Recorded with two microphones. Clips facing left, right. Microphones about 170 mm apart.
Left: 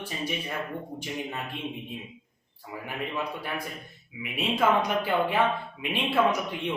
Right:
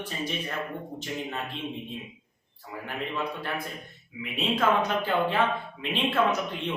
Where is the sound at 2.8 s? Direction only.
10° left (ahead or behind).